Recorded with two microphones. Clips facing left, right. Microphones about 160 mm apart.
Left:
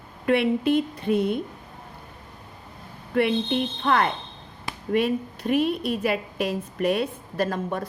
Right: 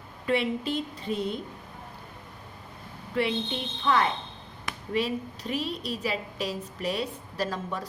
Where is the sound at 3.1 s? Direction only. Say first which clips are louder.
Left 6 dB; 55° left (ahead or behind).